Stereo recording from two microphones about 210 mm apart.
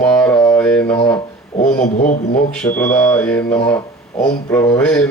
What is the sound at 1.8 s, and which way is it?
Speech, 40° left (ahead or behind).